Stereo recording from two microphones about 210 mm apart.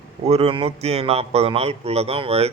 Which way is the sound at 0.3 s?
25° right (ahead or behind).